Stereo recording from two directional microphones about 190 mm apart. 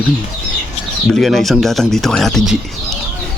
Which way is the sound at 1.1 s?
Centre (ahead or behind).